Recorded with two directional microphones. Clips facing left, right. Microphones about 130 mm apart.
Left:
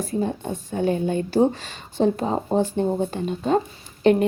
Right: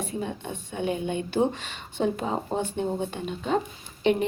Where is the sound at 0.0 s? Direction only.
40° left (ahead or behind).